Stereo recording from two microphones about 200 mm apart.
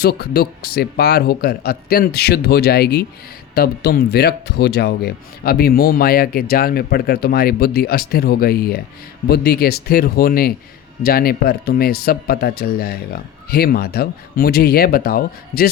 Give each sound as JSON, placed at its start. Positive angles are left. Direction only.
{"t": 0.0, "sound": "speech", "side_deg": 50}